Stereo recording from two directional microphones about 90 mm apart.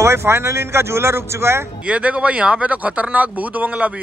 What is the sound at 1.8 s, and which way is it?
Speech, 15° right (ahead or behind).